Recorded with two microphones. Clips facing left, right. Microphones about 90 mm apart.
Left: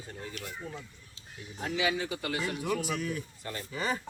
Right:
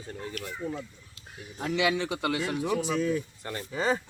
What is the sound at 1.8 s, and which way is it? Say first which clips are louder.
Speech: right 4 dB; 90° right.